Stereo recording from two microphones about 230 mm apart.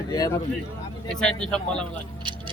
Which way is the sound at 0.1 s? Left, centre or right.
Centre.